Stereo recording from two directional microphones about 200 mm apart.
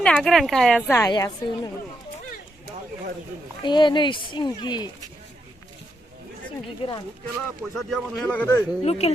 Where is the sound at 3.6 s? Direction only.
25° left (ahead or behind).